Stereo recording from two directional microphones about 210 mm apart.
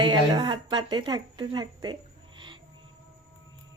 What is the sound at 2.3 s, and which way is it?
Owl, 25° right (ahead or behind).